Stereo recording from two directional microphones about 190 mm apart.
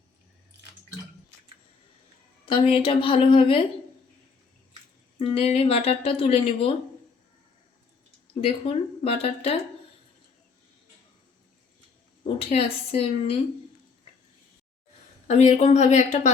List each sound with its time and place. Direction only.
2.5 s a woman's voice: 30° left (ahead or behind)
5.2 s speech: 30° left (ahead or behind)
8.4 s speech: 30° left (ahead or behind)
12.2 s speech: 30° left (ahead or behind)
15.3 s speech: 35° left (ahead or behind)